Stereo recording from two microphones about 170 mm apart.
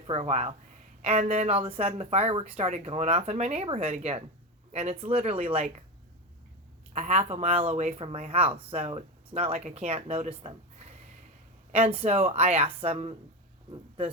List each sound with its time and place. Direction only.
0.1 s speech: 40° right (ahead or behind)
6.9 s speech: 40° right (ahead or behind)